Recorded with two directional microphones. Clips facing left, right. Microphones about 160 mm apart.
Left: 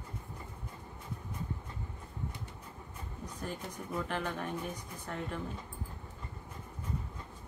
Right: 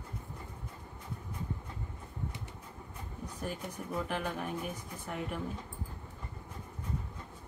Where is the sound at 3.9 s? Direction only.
10° right (ahead or behind).